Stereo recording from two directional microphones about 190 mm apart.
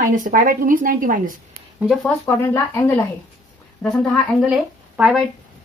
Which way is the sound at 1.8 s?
Centre (ahead or behind).